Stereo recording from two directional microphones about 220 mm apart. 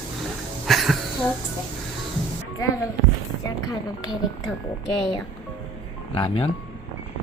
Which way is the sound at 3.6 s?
20° left (ahead or behind).